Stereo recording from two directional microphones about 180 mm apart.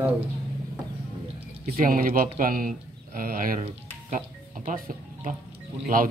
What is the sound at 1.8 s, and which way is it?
Speech, 50° right (ahead or behind).